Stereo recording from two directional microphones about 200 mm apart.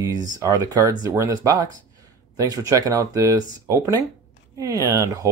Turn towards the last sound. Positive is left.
turn(degrees=-20)  # may be behind; listen again after turning